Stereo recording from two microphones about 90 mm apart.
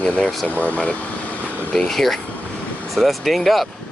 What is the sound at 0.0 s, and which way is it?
Speech, 15° left (ahead or behind).